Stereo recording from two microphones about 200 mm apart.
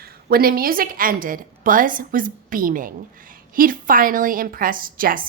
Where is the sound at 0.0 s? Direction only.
50° right (ahead or behind).